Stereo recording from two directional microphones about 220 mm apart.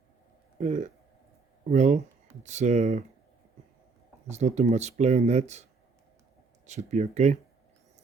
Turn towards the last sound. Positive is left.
turn(degrees=-30)  # may be behind; listen again after turning